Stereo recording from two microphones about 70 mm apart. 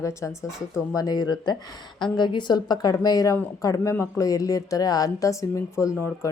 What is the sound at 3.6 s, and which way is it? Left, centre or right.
Speech, left.